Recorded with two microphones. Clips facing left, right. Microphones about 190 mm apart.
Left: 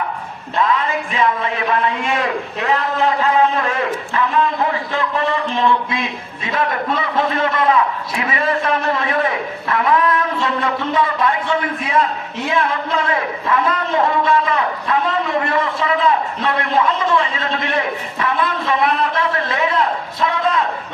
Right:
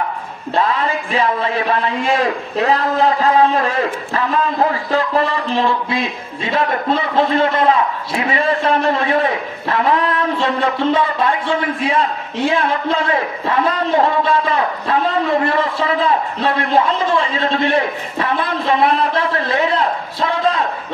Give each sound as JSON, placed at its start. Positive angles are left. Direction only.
{"t": 0.6, "sound": "a man's voice", "side_deg": -35}